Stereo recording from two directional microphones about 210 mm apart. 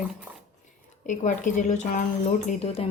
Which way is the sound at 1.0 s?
35° left (ahead or behind).